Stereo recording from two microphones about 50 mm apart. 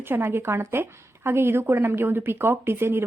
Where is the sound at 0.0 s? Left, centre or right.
Right.